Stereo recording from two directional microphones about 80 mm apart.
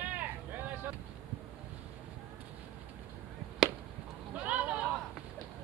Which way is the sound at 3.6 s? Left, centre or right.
Centre.